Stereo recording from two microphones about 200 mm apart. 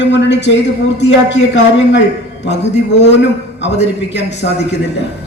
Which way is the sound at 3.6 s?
60° left (ahead or behind).